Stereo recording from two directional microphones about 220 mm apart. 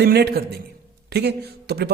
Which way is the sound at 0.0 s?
45° right (ahead or behind).